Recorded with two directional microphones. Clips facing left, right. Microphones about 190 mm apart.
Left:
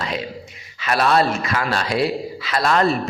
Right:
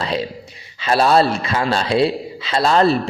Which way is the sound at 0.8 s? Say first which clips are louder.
Right 3 dB; 30° right (ahead or behind).